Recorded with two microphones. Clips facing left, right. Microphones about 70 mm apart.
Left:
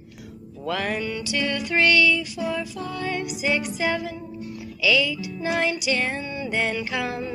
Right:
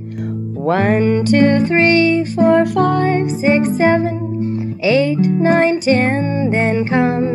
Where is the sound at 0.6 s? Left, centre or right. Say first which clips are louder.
Right 12 dB; right.